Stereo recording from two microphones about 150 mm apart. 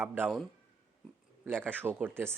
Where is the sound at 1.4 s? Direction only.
15° right (ahead or behind).